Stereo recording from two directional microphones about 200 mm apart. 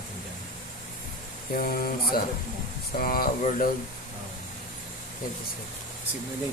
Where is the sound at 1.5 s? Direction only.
45° left (ahead or behind).